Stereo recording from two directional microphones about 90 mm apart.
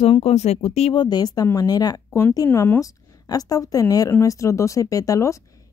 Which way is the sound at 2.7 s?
40° left (ahead or behind).